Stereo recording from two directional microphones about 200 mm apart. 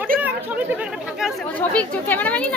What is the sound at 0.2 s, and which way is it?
Speech, 10° right (ahead or behind).